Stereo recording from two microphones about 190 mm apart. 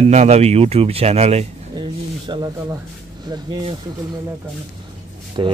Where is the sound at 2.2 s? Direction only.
25° right (ahead or behind).